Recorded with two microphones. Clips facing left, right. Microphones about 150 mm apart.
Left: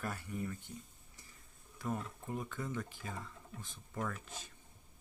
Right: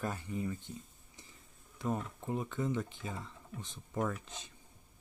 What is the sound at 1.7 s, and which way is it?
Speech, 25° right (ahead or behind).